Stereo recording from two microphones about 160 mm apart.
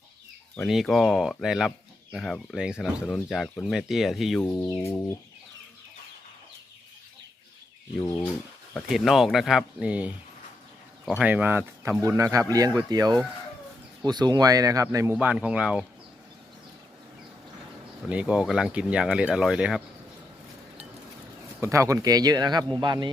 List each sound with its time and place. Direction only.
0.5 s speech: centre (ahead or behind)
4.5 s a sound: 20° left (ahead or behind)
8.9 s speech: centre (ahead or behind)
11.3 s speech: 10° right (ahead or behind)
18.1 s speech: 5° right (ahead or behind)
21.6 s speech: 20° right (ahead or behind)